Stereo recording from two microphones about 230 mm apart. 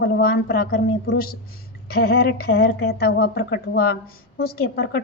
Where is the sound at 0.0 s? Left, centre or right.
Left.